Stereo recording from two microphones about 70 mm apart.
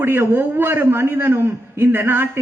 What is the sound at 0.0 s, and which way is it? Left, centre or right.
A man's voice, right.